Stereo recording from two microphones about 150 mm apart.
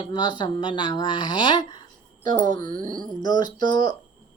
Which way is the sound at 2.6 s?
60° right (ahead or behind).